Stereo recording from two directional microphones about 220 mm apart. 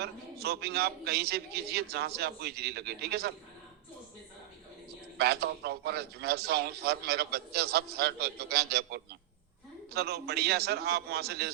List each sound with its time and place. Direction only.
0.0 s a man's voice: 45° right (ahead or behind)
5.1 s a man's voice: 45° right (ahead or behind)